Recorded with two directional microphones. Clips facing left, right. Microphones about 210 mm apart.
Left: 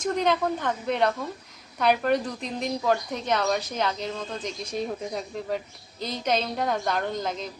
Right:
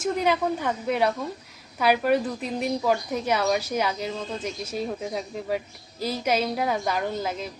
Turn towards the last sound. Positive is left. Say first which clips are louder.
# right 1 dB
turn(degrees=-5)  # may be behind; listen again after turning